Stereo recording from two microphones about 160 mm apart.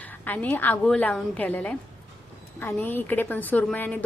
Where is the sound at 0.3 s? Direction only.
10° left (ahead or behind).